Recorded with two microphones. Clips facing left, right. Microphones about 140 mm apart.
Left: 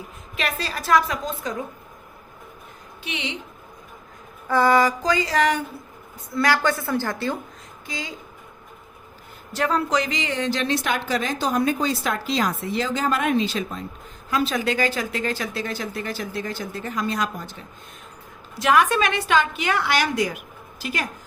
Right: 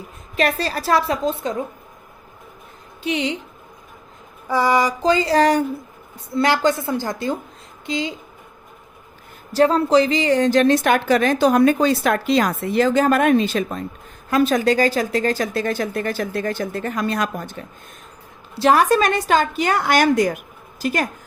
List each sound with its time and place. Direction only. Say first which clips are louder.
0.3 s a woman's voice: right 7 dB; 40° right (ahead or behind)
3.0 s a woman's voice: right 9 dB; 35° right (ahead or behind)
4.4 s a woman's voice: even; 10° right (ahead or behind)
5.0 s a woman's voice: right 5 dB; 30° right (ahead or behind)
6.3 s a woman's voice: right 4 dB; 25° right (ahead or behind)
9.5 s a woman's voice: right 7 dB; 30° right (ahead or behind); by 17.6 s 50° right (ahead or behind)
18.5 s a woman's voice: right 4 dB; 35° right (ahead or behind)